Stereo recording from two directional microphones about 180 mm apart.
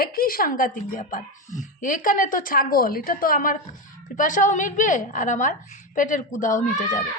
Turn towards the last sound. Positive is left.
turn(degrees=45)  # may be behind; listen again after turning